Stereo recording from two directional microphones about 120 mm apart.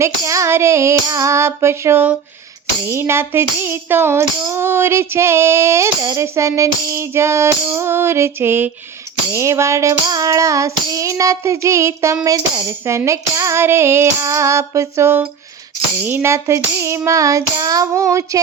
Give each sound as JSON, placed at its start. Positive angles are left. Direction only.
{"t": 0.0, "sound": "child singing", "side_deg": -25}